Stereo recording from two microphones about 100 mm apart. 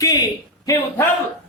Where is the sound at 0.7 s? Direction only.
35° left (ahead or behind).